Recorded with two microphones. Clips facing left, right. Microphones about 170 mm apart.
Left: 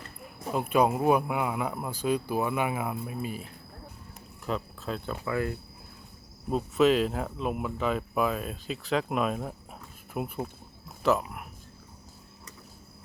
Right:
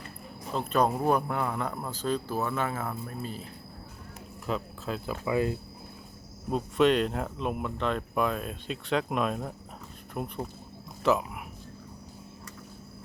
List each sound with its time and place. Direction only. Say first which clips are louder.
0.5 s a man's voice: left 2 dB; 10° left (ahead or behind)
4.4 s speech: even; centre (ahead or behind)
5.2 s speech: right 4 dB; 20° right (ahead or behind)
6.5 s a man's voice: left 1 dB; centre (ahead or behind)